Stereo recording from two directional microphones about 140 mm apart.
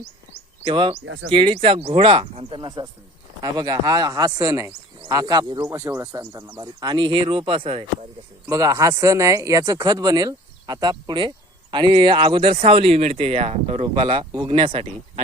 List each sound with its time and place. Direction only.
0.6 s speech: 35° right (ahead or behind)
8.4 s speech: 25° right (ahead or behind); by 15.2 s 40° right (ahead or behind)